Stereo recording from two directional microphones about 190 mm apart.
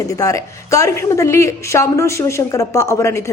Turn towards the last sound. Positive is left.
turn(degrees=15)  # may be behind; listen again after turning